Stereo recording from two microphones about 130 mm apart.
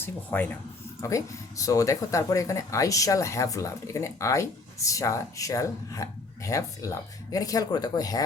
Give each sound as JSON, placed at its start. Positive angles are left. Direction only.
{"t": 0.0, "sound": "speech", "side_deg": 15}
{"t": 1.0, "sound": "speech", "side_deg": 25}